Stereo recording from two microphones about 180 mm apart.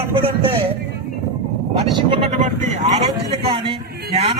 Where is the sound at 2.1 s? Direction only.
35° right (ahead or behind).